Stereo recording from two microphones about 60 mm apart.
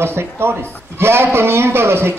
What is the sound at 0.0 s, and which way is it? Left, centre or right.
A man's voice, right.